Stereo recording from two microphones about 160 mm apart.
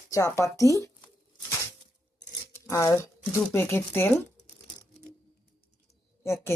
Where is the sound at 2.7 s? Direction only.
20° left (ahead or behind).